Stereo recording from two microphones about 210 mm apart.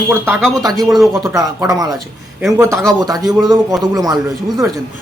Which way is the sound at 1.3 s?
15° right (ahead or behind).